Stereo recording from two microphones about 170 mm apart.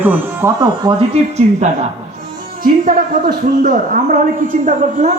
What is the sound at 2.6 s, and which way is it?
A man's voice, 55° right (ahead or behind).